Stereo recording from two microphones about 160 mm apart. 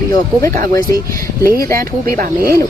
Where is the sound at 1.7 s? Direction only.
65° right (ahead or behind).